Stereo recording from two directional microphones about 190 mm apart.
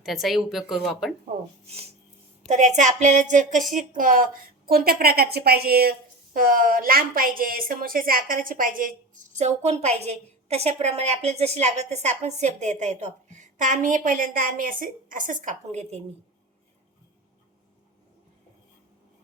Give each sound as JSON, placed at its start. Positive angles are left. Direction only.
{"t": 0.0, "sound": "speech", "side_deg": 0}
{"t": 1.6, "sound": "a woman's voice", "side_deg": -35}